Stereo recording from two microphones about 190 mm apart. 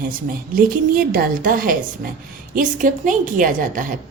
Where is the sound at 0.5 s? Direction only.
50° right (ahead or behind).